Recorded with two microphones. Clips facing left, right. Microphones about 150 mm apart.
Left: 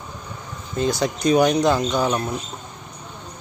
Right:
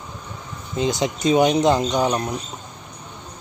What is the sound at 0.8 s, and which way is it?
Speech, 20° right (ahead or behind).